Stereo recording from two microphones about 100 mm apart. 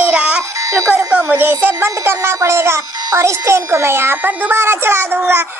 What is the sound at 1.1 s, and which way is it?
A child's voice, 20° right (ahead or behind).